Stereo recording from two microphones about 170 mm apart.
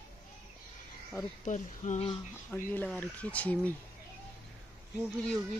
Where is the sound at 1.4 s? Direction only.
45° left (ahead or behind).